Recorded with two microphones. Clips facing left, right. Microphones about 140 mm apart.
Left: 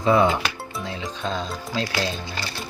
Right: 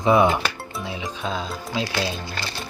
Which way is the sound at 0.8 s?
15° right (ahead or behind).